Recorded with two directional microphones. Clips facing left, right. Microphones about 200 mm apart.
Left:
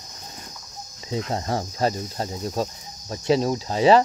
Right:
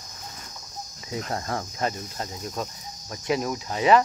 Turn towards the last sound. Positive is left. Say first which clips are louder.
# left 3 dB
turn(degrees=30)  # may be behind; listen again after turning